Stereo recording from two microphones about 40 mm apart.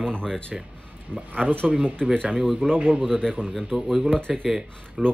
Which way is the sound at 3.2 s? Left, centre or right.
Centre.